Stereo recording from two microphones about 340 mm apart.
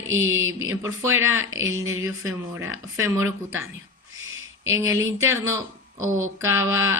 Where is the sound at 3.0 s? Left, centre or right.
Centre.